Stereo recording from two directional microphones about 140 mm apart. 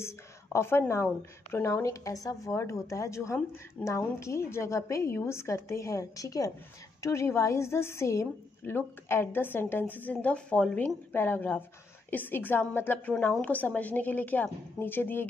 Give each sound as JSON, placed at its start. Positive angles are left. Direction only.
{"t": 0.0, "sound": "a woman's voice", "side_deg": 20}